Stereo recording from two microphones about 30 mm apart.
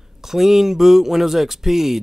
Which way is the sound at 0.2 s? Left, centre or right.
Centre.